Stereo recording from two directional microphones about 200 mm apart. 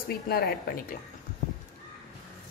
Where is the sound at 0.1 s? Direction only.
50° left (ahead or behind).